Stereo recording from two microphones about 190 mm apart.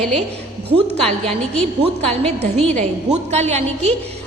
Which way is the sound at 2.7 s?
35° right (ahead or behind).